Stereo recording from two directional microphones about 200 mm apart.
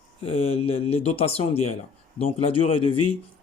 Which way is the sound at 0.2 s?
30° left (ahead or behind).